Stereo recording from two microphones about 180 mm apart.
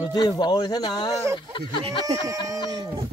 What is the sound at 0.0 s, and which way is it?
Speech, 20° left (ahead or behind).